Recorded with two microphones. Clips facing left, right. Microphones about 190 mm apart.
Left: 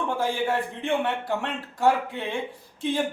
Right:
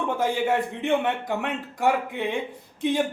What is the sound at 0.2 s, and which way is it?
A man's voice, 20° right (ahead or behind).